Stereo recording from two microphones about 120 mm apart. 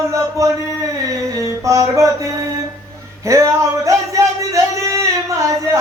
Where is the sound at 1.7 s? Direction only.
25° right (ahead or behind).